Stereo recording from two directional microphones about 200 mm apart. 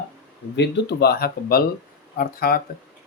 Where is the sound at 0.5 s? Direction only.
60° left (ahead or behind).